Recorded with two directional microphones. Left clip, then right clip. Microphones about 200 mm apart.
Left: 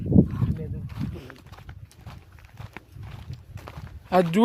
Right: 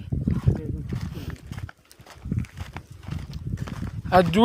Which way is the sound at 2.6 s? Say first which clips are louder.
Right 3 dB; 50° right (ahead or behind).